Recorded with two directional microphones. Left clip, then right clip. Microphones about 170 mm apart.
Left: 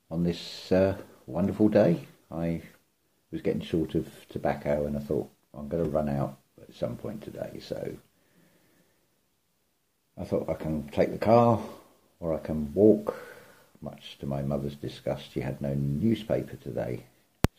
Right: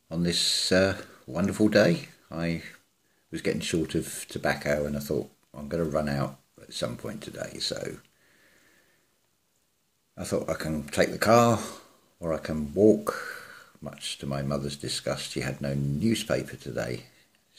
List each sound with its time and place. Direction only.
0.1 s speech: 15° right (ahead or behind)
10.1 s speech: 15° right (ahead or behind)